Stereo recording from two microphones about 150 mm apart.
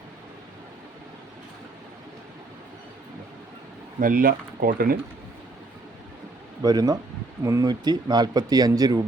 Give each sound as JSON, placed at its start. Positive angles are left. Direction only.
{"t": 4.0, "sound": "speech", "side_deg": -70}
{"t": 6.6, "sound": "speech", "side_deg": -25}